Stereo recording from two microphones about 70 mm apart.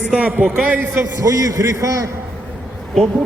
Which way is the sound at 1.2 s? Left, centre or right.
Right.